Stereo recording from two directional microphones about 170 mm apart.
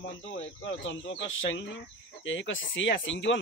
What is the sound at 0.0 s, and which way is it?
Speech, 90° left.